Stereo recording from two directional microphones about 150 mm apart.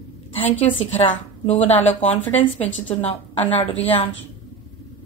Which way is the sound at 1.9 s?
10° left (ahead or behind).